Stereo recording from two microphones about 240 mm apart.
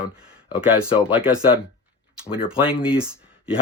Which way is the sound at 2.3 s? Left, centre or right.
Centre.